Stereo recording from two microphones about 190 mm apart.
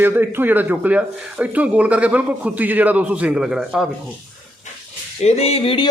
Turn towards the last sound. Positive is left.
turn(degrees=30)  # may be behind; listen again after turning